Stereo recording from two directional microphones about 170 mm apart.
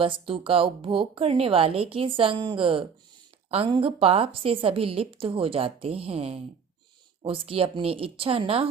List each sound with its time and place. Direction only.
0.0 s a woman's voice: 30° right (ahead or behind)